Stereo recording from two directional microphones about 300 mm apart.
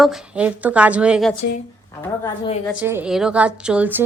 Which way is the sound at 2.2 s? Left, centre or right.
Centre.